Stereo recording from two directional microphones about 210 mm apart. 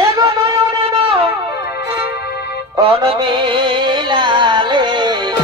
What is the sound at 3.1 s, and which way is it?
Music, 25° right (ahead or behind).